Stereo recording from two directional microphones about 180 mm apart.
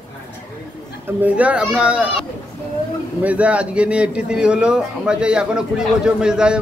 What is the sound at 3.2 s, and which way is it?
A man's voice, 5° right (ahead or behind).